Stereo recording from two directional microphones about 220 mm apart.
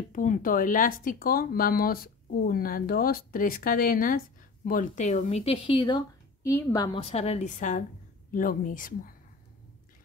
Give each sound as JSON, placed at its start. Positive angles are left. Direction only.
{"t": 0.1, "sound": "a woman's voice", "side_deg": 35}